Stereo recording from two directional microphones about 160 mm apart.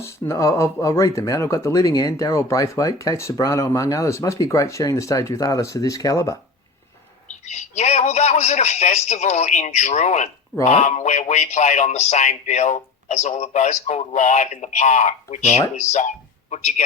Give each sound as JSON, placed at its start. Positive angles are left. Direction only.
{"t": 0.0, "sound": "speech", "side_deg": 20}
{"t": 7.5, "sound": "a man's voice", "side_deg": 45}